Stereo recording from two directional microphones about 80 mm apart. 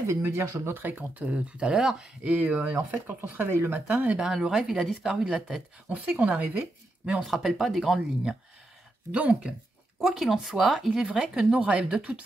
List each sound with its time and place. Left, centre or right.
0.0 s speech: right; by 2.3 s centre
3.1 s speech: right; by 5.6 s centre
5.9 s speech: centre
7.2 s speech: centre